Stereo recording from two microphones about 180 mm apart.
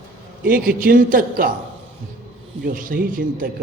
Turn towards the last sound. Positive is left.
turn(degrees=-50)  # may be behind; listen again after turning